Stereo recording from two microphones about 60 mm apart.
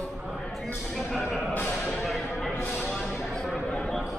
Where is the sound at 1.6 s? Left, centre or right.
Centre.